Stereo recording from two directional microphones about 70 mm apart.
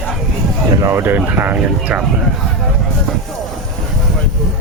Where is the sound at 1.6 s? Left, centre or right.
Centre.